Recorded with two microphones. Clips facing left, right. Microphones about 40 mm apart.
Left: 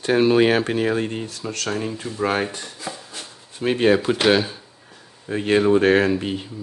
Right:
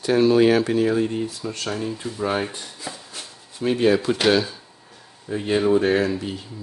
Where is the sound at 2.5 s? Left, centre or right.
Left.